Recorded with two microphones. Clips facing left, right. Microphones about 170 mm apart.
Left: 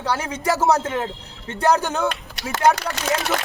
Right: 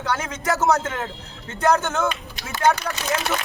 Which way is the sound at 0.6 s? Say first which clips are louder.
Left 1 dB; 30° left (ahead or behind).